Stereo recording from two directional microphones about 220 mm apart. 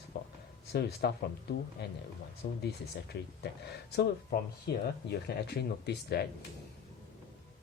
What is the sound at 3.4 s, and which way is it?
Speech, 50° left (ahead or behind).